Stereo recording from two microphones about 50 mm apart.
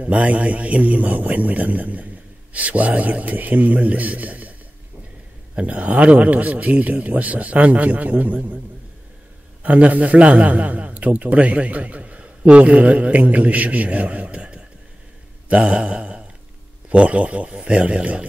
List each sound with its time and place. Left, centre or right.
0.0 s a man's voice: right
5.6 s a man's voice: right
9.6 s a man's voice: right
15.7 s mantra: right
16.9 s a man's voice: right